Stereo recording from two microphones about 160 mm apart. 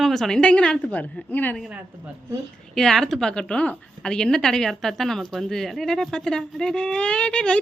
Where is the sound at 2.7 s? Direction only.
5° left (ahead or behind).